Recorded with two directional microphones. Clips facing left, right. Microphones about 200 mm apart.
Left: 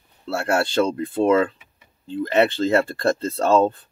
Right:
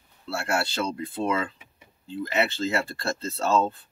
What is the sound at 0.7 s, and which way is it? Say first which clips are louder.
Speech: left 9 dB; 50° left (ahead or behind).